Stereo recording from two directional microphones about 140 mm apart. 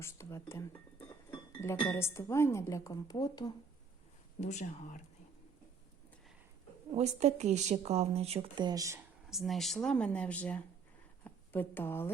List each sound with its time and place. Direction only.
0.0 s a woman's voice: 20° left (ahead or behind)
1.8 s a woman's voice: 15° left (ahead or behind)
4.4 s speech: 60° left (ahead or behind)
6.9 s speech: 55° right (ahead or behind)
8.5 s speech: 30° right (ahead or behind)
9.3 s a woman's voice: centre (ahead or behind); by 12.1 s 15° left (ahead or behind)